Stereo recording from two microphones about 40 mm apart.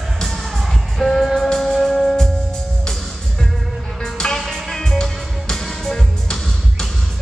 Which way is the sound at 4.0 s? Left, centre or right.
Centre.